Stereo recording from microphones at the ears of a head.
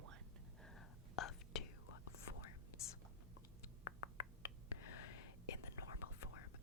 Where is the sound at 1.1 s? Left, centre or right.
Left.